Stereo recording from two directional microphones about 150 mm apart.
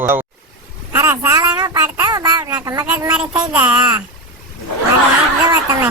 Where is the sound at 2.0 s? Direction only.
25° right (ahead or behind).